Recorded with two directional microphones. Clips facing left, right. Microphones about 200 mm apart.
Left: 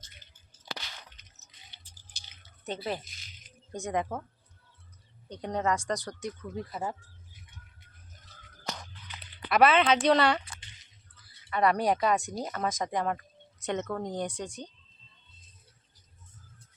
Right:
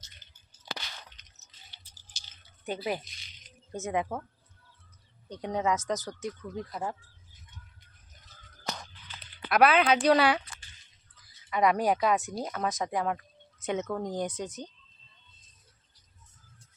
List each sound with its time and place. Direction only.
1.2 s drip: 10° left (ahead or behind)
2.1 s drip: 55° left (ahead or behind)
2.6 s a woman's voice: 10° right (ahead or behind)
3.0 s music: 5° left (ahead or behind)
5.4 s a woman's voice: 5° right (ahead or behind)
9.5 s speech: centre (ahead or behind)
11.5 s speech: 10° right (ahead or behind)